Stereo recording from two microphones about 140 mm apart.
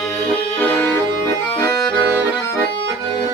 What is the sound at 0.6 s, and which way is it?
Accordion, 15° left (ahead or behind).